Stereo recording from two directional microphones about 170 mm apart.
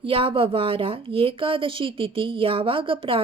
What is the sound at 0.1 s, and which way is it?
A woman's voice, 30° right (ahead or behind).